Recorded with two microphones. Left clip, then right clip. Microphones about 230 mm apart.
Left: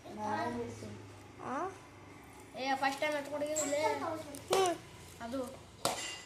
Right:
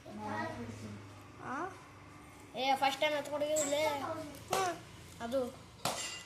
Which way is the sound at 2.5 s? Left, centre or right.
Right.